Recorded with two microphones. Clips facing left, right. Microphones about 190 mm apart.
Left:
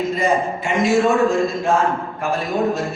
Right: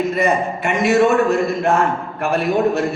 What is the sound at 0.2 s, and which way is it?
A man's voice, 65° right (ahead or behind).